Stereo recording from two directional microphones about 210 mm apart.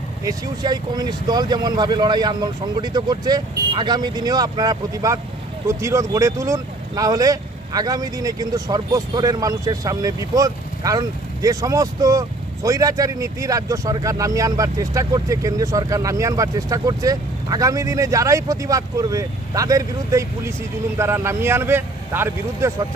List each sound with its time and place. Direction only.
0.2 s speech: 15° right (ahead or behind)